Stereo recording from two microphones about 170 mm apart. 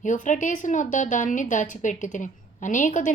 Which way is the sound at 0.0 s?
45° left (ahead or behind).